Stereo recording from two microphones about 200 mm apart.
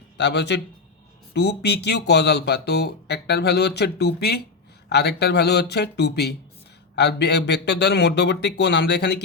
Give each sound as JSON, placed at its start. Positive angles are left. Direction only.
{"t": 0.2, "sound": "speech", "side_deg": 60}